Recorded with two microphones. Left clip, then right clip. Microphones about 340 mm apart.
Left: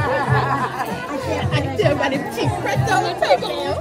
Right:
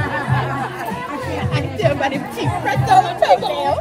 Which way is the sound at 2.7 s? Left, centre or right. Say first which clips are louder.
Right 7 dB; centre.